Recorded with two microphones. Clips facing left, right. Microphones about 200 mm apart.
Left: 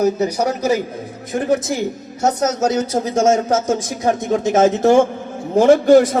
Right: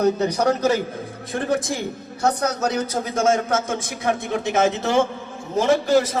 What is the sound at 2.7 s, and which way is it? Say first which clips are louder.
A man's voice: left 5 dB; 30° left (ahead or behind).